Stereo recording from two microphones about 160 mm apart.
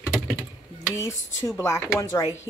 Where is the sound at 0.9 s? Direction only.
20° left (ahead or behind).